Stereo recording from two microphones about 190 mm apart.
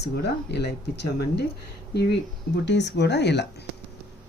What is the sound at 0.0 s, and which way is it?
Speech, 60° left (ahead or behind).